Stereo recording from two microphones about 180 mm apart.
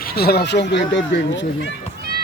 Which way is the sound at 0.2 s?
60° left (ahead or behind).